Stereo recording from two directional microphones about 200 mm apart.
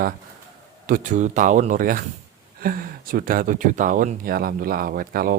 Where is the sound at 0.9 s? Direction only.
40° right (ahead or behind).